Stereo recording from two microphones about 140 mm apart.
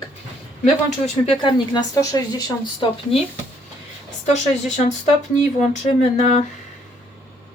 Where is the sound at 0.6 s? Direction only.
50° left (ahead or behind).